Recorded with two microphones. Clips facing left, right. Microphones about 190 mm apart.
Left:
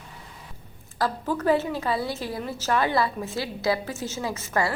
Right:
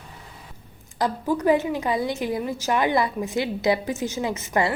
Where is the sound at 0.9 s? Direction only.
15° right (ahead or behind).